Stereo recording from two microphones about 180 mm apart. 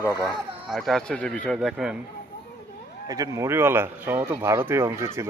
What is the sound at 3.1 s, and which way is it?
Speech, 20° right (ahead or behind).